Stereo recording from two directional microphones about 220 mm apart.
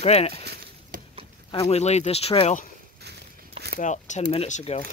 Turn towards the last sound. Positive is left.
turn(degrees=30)  # may be behind; listen again after turning